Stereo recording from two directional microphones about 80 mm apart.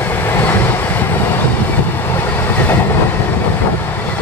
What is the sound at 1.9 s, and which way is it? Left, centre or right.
Train, left.